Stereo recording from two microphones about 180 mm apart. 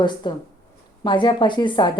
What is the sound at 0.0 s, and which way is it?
Speech, 25° left (ahead or behind).